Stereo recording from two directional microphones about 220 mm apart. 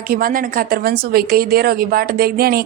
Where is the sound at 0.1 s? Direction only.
40° right (ahead or behind).